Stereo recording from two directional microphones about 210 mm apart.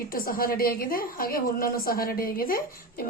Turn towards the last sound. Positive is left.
turn(degrees=45)  # may be behind; listen again after turning